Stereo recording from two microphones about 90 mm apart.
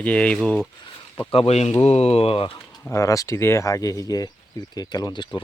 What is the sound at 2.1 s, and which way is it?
Speech, 90° left.